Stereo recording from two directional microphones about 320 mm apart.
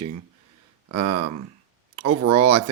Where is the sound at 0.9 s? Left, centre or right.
Right.